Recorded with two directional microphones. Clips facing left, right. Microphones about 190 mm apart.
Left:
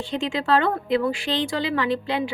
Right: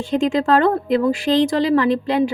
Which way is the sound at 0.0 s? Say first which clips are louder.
Right 8 dB; 45° right (ahead or behind).